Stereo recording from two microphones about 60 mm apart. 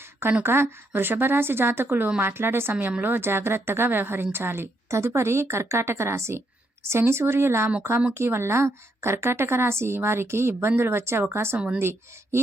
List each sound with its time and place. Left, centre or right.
0.0 s a sound: right
0.4 s a woman's voice: right
11.5 s speech: centre
11.8 s a woman's voice: right